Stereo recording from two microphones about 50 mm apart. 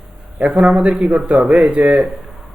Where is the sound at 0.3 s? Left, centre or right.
Right.